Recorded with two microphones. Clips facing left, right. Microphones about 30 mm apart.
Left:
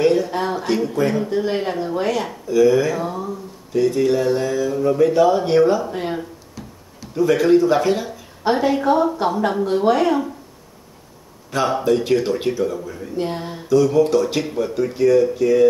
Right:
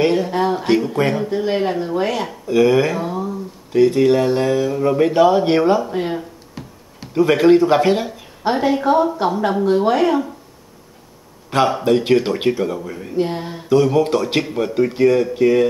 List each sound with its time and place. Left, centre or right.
0.0 s a sound: right
0.3 s a woman's voice: centre
0.6 s speech: right
0.9 s speech: right
1.3 s a woman's voice: centre
2.4 s speech: right
5.8 s a woman's voice: centre
6.5 s a sound: right
8.5 s a woman's voice: centre
11.8 s speech: right
13.2 s a woman's voice: centre
13.7 s speech: right